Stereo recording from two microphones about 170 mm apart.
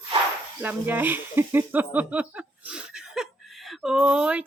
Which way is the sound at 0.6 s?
10° right (ahead or behind).